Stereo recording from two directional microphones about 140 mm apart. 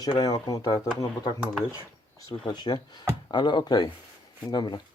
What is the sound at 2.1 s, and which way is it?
Speech, 30° left (ahead or behind).